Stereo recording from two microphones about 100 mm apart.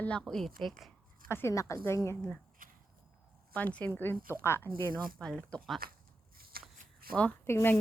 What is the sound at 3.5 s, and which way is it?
A woman's voice, 15° left (ahead or behind).